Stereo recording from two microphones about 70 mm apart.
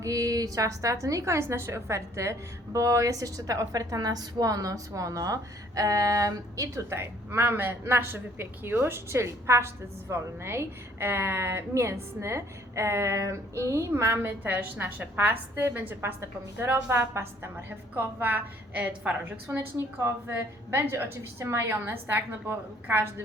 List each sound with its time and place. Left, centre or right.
0.0 s a woman's voice: right
6.9 s a woman's voice: right
19.5 s a woman's voice: right